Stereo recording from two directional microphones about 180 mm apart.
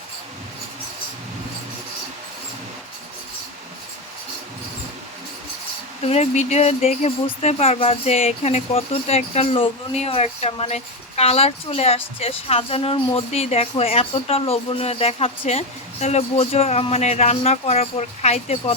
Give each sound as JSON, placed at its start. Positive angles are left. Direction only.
{"t": 6.0, "sound": "speech", "side_deg": 35}